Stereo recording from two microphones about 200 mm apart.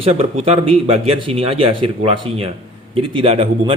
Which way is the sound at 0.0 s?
30° right (ahead or behind).